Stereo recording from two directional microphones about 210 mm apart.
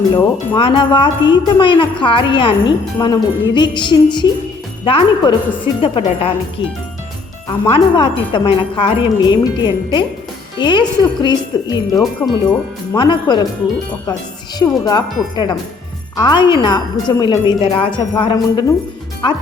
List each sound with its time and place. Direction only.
0.5 s speech: 25° left (ahead or behind)
7.4 s speech: 20° left (ahead or behind)
11.9 s speech: centre (ahead or behind)
12.9 s speech: 20° left (ahead or behind)
14.6 s speech: 20° left (ahead or behind)